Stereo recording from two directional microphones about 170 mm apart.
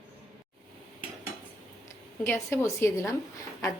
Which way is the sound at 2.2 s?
10° left (ahead or behind).